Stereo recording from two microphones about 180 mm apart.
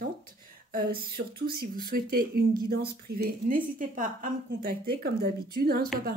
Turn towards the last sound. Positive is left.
turn(degrees=-60)  # may be behind; listen again after turning